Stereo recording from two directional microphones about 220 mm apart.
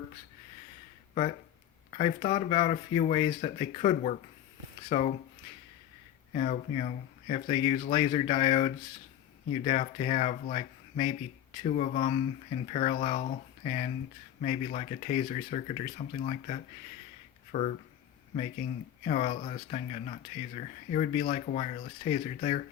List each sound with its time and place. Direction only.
1.9 s speech: 30° left (ahead or behind)
6.3 s speech: 30° left (ahead or behind)
19.0 s speech: 30° left (ahead or behind)